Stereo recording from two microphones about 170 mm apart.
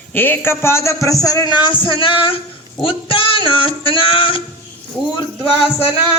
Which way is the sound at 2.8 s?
30° left (ahead or behind).